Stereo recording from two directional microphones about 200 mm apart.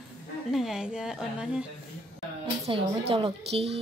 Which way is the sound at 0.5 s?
Centre (ahead or behind).